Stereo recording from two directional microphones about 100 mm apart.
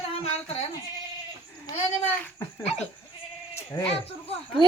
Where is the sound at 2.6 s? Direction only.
90° left.